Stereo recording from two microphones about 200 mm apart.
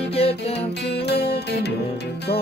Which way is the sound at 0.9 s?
55° left (ahead or behind).